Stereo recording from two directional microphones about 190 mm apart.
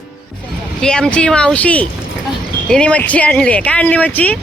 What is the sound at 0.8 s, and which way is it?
Speech, 5° left (ahead or behind).